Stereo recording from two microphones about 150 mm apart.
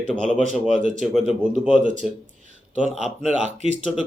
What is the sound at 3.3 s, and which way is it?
Speech, 50° right (ahead or behind).